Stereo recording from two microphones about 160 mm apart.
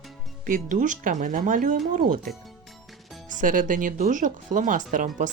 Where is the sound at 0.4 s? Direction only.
55° right (ahead or behind).